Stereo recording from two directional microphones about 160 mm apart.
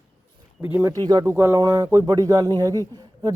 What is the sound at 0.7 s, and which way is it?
Speech, 15° right (ahead or behind).